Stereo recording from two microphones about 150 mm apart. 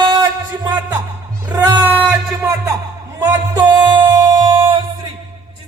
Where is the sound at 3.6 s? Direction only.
30° right (ahead or behind).